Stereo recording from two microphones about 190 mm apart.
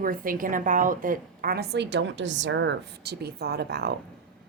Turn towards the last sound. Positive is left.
turn(degrees=-60)  # may be behind; listen again after turning